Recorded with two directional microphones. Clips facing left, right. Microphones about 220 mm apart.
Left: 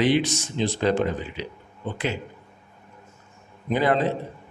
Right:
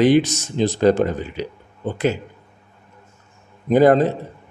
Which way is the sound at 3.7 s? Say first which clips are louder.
Right 8 dB; 45° right (ahead or behind).